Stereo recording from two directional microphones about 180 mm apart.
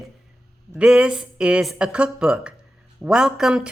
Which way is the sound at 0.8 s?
5° right (ahead or behind).